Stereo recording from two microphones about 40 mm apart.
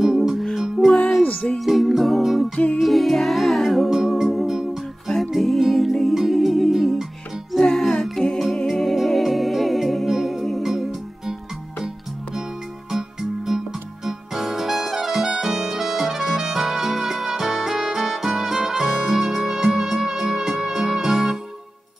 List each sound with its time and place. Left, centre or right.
0.0 s music: centre
1.6 s music: centre
2.5 s music: left
2.8 s music: centre
8.0 s humming: centre
8.6 s music: centre
12.9 s music: centre